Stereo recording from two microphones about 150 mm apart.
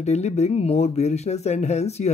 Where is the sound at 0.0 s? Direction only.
50° left (ahead or behind).